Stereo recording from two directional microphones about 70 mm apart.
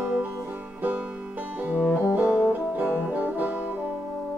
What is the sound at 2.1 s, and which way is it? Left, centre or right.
Music, centre.